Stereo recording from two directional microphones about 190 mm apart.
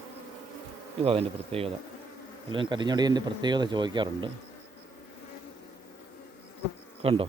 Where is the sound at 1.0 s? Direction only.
30° right (ahead or behind).